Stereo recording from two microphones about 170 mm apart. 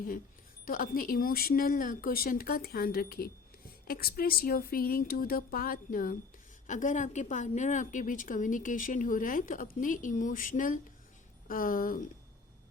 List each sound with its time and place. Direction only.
0.6 s a woman's voice: 55° left (ahead or behind)